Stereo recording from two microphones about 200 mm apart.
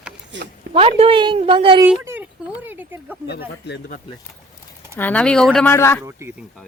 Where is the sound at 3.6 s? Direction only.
55° left (ahead or behind).